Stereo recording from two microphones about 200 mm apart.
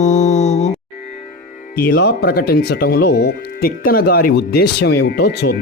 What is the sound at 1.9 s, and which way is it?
Speech, 55° left (ahead or behind).